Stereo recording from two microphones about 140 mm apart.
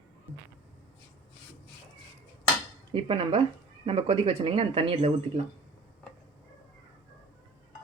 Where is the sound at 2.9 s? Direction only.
40° right (ahead or behind).